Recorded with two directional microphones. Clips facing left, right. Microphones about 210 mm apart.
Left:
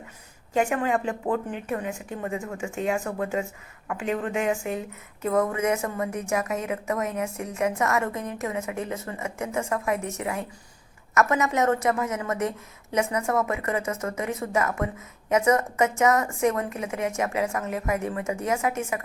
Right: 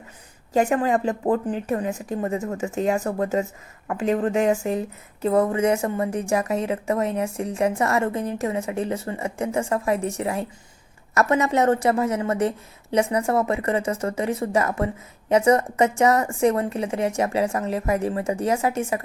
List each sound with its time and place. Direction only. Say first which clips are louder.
0.5 s a woman's voice: right 4 dB; 35° right (ahead or behind)